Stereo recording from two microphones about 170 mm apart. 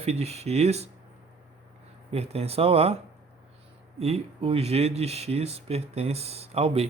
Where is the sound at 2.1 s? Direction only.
35° right (ahead or behind).